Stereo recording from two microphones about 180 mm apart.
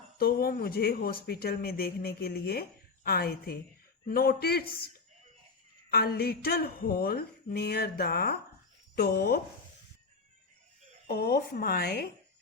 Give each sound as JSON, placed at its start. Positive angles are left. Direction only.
{"t": 0.2, "sound": "speech", "side_deg": 55}
{"t": 5.9, "sound": "speech", "side_deg": 60}
{"t": 11.0, "sound": "speech", "side_deg": 60}